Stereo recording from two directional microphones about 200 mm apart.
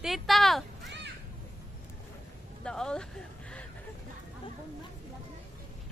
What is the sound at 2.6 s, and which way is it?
Speech, 5° left (ahead or behind).